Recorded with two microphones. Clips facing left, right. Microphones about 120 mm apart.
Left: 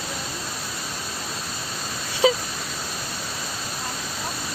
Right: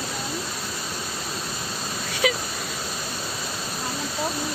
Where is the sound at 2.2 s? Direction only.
25° left (ahead or behind).